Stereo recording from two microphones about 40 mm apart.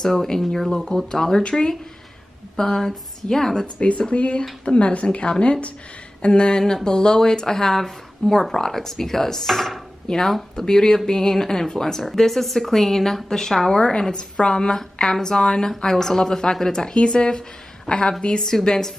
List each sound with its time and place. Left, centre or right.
0.0 s speech: centre
4.1 s a woman's voice: left